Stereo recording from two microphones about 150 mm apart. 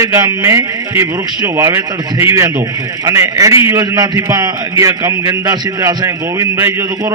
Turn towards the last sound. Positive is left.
turn(degrees=-20)  # may be behind; listen again after turning